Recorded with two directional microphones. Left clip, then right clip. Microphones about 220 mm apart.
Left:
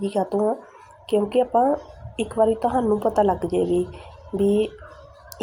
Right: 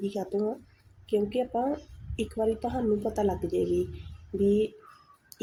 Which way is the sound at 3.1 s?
5° left (ahead or behind).